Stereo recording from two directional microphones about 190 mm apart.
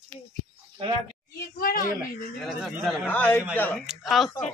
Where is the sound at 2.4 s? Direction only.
Centre (ahead or behind).